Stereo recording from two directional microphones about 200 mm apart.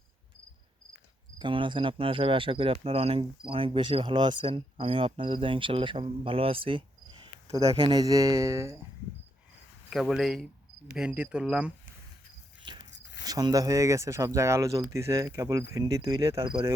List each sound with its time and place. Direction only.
1.4 s speech: 25° right (ahead or behind)
9.9 s speech: centre (ahead or behind)
12.9 s zipper: 60° left (ahead or behind)
13.2 s speech: 20° right (ahead or behind)